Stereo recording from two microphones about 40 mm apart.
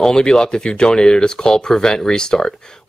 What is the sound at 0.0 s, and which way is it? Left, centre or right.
Speech, centre.